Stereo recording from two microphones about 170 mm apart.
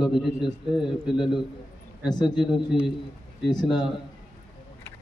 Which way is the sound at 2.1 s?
25° left (ahead or behind).